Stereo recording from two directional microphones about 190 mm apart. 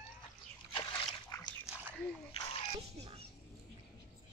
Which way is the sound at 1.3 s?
15° left (ahead or behind).